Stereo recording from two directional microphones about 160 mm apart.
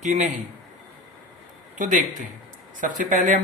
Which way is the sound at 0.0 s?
50° right (ahead or behind).